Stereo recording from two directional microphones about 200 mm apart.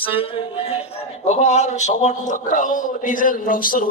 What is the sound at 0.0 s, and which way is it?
A man's voice, 25° left (ahead or behind).